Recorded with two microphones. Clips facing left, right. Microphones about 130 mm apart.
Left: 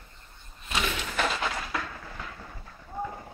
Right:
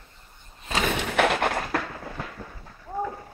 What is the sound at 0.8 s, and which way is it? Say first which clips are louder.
Thump: right 6 dB; 60° right (ahead or behind).